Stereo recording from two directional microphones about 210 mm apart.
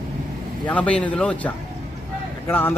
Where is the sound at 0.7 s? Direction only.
5° left (ahead or behind).